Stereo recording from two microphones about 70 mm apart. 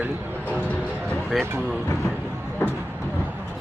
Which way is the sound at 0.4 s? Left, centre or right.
Left.